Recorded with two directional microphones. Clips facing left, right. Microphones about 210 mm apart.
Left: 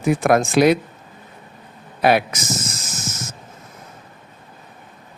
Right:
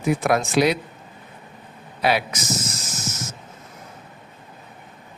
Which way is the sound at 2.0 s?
55° left (ahead or behind).